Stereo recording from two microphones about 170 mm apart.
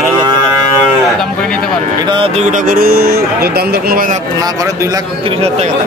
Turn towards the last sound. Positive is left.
turn(degrees=-60)  # may be behind; listen again after turning